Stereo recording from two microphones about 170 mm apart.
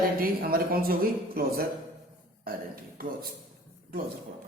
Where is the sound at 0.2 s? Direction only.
60° right (ahead or behind).